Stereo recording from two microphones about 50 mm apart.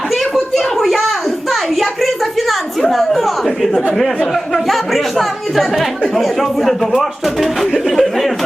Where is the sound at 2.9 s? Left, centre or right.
Centre.